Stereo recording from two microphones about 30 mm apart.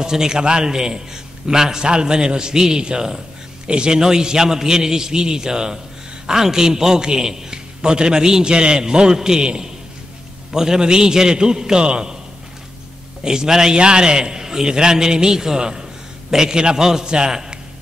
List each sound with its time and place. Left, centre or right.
0.0 s a man's voice: right
13.2 s a man's voice: right